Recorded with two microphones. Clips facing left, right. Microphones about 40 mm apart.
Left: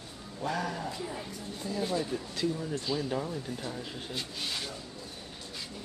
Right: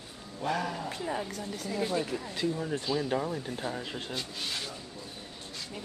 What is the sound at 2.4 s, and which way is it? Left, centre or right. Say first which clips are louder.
Speech: right 1 dB; right.